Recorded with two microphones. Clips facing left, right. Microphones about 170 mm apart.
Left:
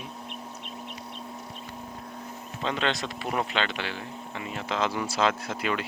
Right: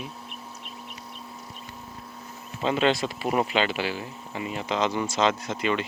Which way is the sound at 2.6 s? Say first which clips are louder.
Right 5 dB; 5° right (ahead or behind).